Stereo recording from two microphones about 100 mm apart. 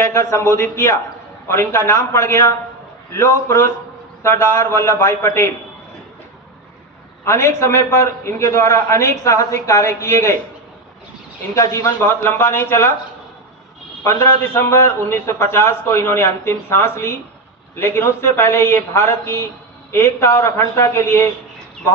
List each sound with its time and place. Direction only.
0.0 s a man's voice: 30° left (ahead or behind)
7.2 s a man's voice: 30° left (ahead or behind)
11.5 s a man's voice: 30° left (ahead or behind)
14.0 s a man's voice: 25° left (ahead or behind)